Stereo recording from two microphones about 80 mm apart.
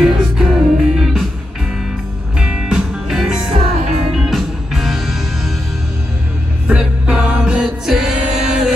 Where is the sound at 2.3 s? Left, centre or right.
Centre.